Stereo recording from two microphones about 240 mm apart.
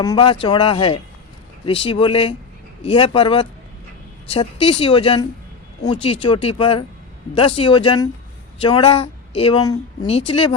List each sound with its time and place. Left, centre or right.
0.0 s speech: centre